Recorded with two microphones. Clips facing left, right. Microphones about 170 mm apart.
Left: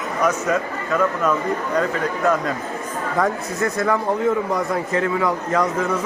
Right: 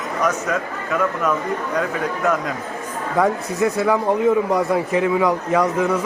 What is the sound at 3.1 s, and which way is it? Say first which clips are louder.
A man's voice: right 3 dB; 10° right (ahead or behind).